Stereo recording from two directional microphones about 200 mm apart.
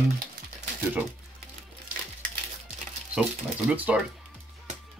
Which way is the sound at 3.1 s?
5° right (ahead or behind).